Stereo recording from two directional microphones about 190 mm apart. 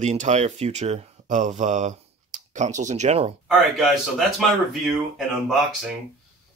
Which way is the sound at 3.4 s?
Centre (ahead or behind).